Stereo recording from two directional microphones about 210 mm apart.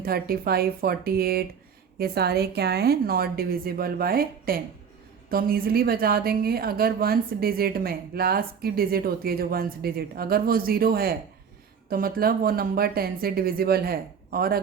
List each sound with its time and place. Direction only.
0.0 s a woman's voice: 45° right (ahead or behind)